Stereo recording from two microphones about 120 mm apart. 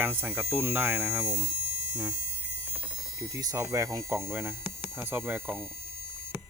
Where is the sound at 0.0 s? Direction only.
15° right (ahead or behind).